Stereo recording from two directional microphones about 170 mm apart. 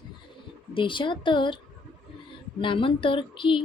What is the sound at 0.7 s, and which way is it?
Speech, 30° left (ahead or behind).